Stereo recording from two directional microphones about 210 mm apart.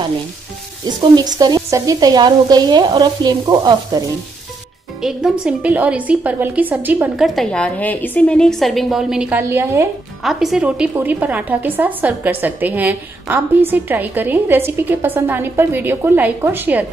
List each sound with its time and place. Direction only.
0.8 s speech: 20° right (ahead or behind)
5.0 s a woman's voice: 5° right (ahead or behind)
10.2 s a woman's voice: centre (ahead or behind)